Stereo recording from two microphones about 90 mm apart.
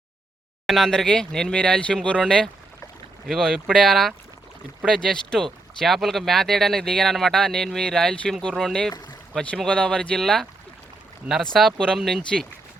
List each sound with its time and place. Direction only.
0.7 s speech: 5° left (ahead or behind)
11.5 s speech: 5° left (ahead or behind)